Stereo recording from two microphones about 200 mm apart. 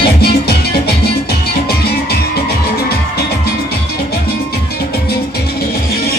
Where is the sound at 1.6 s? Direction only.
50° left (ahead or behind).